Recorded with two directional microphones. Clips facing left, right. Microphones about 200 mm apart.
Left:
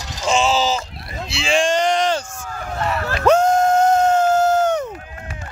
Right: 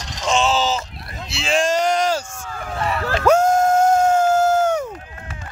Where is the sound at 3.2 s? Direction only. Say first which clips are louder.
Left 1 dB; 10° right (ahead or behind).